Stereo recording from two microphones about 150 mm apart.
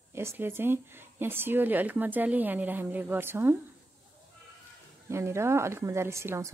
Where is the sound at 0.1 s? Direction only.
15° right (ahead or behind).